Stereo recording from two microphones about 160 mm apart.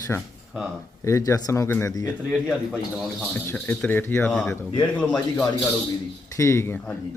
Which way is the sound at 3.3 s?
10° left (ahead or behind).